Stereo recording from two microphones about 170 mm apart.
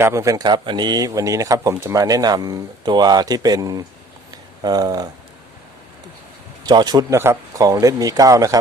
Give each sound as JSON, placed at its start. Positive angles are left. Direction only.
{"t": 0.0, "sound": "speech", "side_deg": -15}
{"t": 6.7, "sound": "speech", "side_deg": -25}